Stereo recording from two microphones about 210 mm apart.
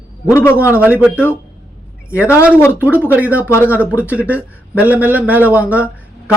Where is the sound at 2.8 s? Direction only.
10° right (ahead or behind).